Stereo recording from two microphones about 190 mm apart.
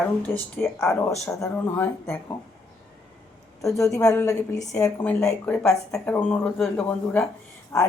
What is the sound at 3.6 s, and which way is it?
Speech, 15° left (ahead or behind).